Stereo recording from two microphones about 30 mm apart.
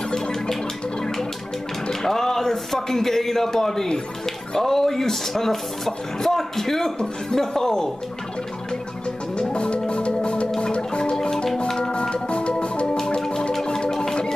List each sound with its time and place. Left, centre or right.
0.1 s music: centre
1.9 s speech: centre
9.4 s music: left
10.6 s marimba: left
11.4 s music: centre
12.0 s music: left
13.2 s music: left